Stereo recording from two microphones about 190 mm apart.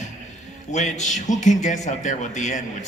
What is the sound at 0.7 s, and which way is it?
A man's voice, 40° left (ahead or behind).